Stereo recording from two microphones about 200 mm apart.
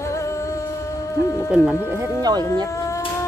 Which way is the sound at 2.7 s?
15° left (ahead or behind).